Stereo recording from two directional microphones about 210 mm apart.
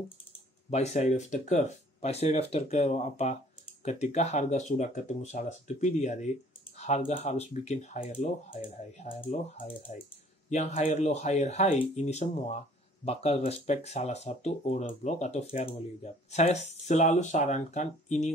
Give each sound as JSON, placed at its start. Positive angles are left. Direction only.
{"t": 0.7, "sound": "speech", "side_deg": 30}